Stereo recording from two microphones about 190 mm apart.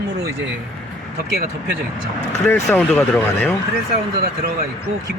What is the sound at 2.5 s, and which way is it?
Speech, 5° left (ahead or behind).